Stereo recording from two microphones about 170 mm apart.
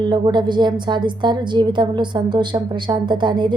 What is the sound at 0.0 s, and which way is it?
A woman's voice, 25° right (ahead or behind).